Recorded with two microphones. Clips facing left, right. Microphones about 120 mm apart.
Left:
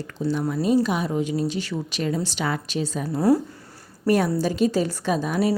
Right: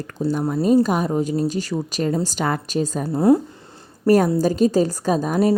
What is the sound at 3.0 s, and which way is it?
Speech, 25° right (ahead or behind).